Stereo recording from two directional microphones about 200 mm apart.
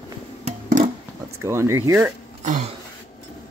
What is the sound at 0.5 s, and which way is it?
Music, 40° right (ahead or behind).